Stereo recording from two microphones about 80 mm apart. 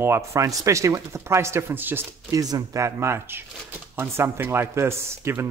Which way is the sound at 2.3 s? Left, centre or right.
Right.